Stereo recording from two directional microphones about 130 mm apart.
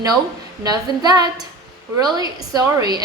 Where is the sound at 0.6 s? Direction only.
30° right (ahead or behind).